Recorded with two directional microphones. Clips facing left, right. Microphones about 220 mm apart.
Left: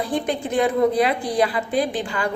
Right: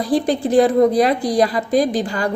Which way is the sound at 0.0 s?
35° right (ahead or behind).